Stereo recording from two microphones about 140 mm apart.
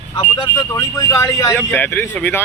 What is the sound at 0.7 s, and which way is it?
Vehicle, 20° left (ahead or behind).